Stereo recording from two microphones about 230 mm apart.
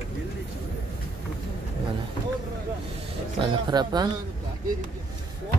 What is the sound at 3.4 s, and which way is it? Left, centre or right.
Speech, centre.